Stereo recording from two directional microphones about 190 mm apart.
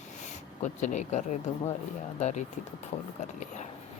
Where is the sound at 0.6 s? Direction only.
40° left (ahead or behind).